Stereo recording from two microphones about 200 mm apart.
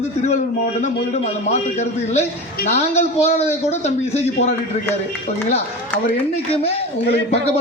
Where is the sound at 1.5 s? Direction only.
35° left (ahead or behind).